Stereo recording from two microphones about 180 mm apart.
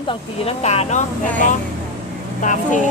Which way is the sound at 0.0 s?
30° left (ahead or behind).